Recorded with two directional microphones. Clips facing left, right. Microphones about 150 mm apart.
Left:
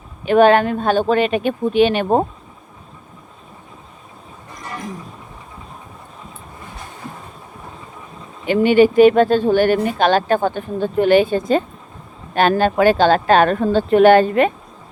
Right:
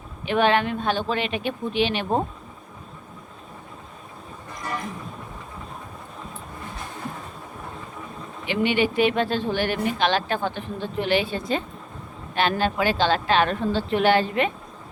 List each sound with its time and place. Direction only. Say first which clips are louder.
0.3 s speech: left 8 dB; 45° left (ahead or behind)
8.4 s speech: left 10 dB; 45° left (ahead or behind)